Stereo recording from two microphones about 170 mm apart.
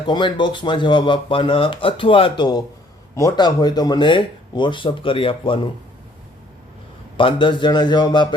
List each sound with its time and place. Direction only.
0.0 s speech: 30° left (ahead or behind)
7.2 s speech: 30° left (ahead or behind)